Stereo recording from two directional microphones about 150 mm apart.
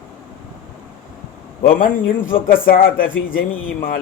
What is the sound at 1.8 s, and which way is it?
Speech, 70° left (ahead or behind).